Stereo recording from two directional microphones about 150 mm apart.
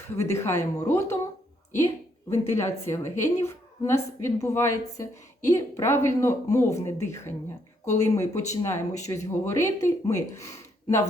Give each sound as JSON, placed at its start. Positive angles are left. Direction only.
{"t": 0.3, "sound": "speech", "side_deg": 20}
{"t": 2.3, "sound": "a woman's voice", "side_deg": 20}